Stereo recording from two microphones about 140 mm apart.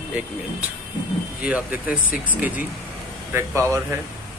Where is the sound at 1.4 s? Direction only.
10° right (ahead or behind).